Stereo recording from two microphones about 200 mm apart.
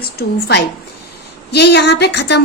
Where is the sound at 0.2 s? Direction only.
55° left (ahead or behind).